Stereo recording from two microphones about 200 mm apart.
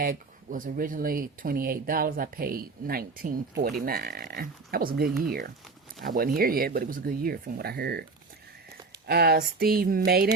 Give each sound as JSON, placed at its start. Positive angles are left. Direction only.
{"t": 0.0, "sound": "speech", "side_deg": -45}
{"t": 9.0, "sound": "speech", "side_deg": -50}